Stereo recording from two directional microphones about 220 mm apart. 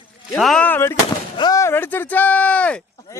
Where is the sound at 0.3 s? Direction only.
Centre (ahead or behind).